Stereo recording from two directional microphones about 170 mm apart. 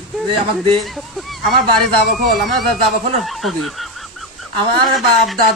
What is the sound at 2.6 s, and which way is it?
Speech, centre (ahead or behind).